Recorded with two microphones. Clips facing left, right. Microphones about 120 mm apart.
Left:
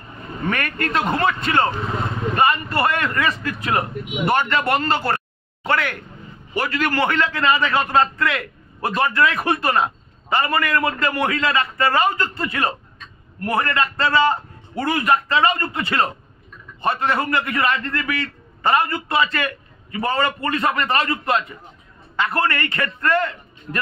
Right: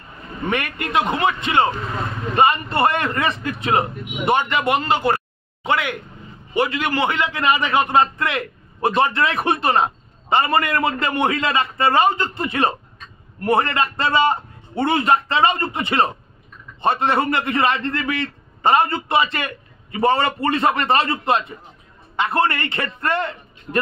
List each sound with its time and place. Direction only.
0.5 s a man's voice: 20° right (ahead or behind)